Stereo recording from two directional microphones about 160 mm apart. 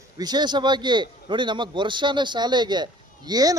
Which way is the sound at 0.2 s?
25° right (ahead or behind).